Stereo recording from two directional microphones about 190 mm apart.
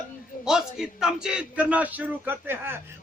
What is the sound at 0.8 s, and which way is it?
Speech, 5° right (ahead or behind).